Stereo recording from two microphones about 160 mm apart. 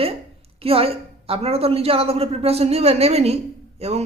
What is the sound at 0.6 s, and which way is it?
A woman's voice, 35° right (ahead or behind).